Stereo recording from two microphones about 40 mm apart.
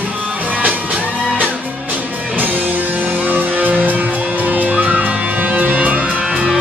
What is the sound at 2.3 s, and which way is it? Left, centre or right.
Music, right.